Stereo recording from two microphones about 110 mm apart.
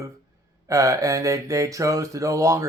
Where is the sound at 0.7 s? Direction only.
30° right (ahead or behind).